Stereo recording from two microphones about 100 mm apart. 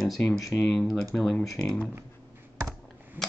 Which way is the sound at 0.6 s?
10° left (ahead or behind).